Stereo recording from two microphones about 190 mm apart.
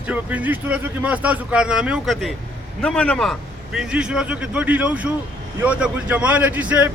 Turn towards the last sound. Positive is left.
turn(degrees=-5)  # may be behind; listen again after turning